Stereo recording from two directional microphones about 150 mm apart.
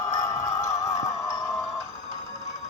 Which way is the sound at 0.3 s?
20° left (ahead or behind).